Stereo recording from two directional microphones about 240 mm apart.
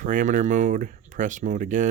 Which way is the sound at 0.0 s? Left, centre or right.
Right.